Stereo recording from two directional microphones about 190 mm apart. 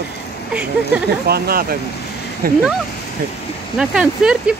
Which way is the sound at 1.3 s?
50° right (ahead or behind).